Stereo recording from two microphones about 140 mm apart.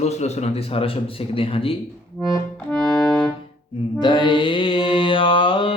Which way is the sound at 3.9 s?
35° left (ahead or behind).